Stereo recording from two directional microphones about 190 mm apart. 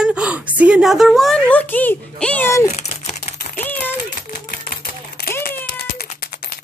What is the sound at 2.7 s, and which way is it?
Typewriter, 35° left (ahead or behind).